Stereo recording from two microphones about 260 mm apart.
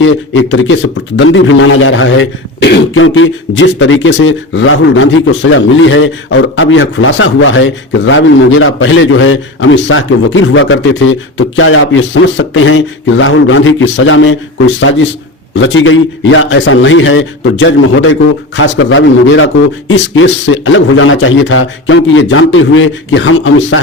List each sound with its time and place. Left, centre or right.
0.0 s a man's voice: left